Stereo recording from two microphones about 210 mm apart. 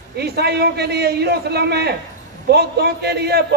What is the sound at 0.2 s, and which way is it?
A man's voice, 50° right (ahead or behind).